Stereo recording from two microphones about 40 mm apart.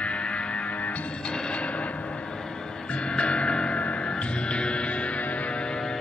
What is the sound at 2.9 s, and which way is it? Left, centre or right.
Music, left.